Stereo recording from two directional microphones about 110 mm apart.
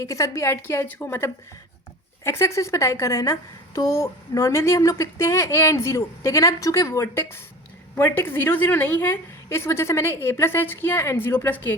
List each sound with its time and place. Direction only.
0.0 s a woman's voice: 30° left (ahead or behind)